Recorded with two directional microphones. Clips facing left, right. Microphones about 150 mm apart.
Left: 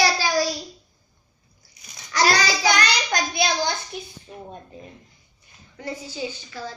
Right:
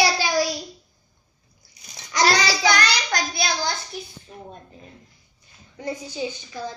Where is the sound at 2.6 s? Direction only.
15° left (ahead or behind).